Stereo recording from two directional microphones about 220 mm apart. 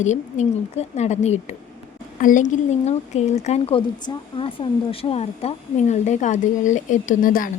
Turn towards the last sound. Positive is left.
turn(degrees=40)  # may be behind; listen again after turning